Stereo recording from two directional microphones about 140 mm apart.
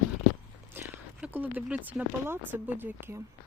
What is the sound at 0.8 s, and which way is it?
Horse, 15° right (ahead or behind).